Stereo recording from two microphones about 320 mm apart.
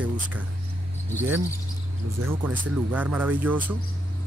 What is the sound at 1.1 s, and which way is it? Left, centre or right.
Speech, centre.